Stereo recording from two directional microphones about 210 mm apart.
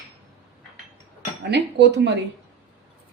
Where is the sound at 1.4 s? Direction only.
55° right (ahead or behind).